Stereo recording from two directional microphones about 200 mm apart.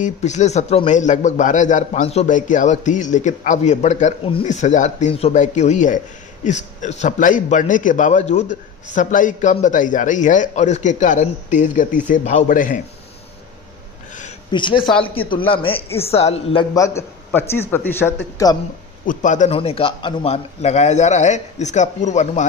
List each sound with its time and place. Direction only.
0.0 s a man's voice: 35° left (ahead or behind)
14.5 s a woman's voice: 25° left (ahead or behind)
16.7 s a man's voice: 15° left (ahead or behind)
19.0 s a man's voice: 40° left (ahead or behind)